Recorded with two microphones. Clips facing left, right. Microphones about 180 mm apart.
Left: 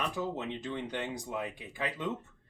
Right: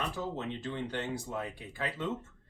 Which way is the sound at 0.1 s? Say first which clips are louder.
Left 1 dB; 15° left (ahead or behind).